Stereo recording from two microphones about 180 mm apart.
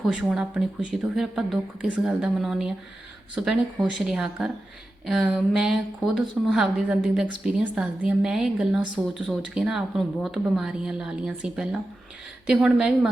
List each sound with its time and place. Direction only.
0.0 s speech: centre (ahead or behind)